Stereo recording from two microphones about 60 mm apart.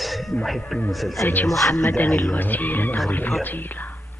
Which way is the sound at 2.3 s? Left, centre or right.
Left.